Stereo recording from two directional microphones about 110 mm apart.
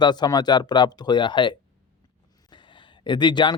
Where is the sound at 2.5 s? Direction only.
45° left (ahead or behind).